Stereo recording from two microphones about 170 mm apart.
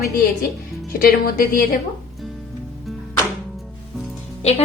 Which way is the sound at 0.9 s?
60° left (ahead or behind).